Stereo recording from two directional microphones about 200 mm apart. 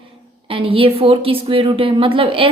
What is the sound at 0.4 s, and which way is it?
Speech, 25° right (ahead or behind).